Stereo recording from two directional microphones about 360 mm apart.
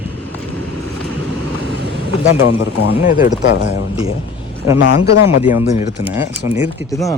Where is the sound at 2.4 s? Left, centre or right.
Left.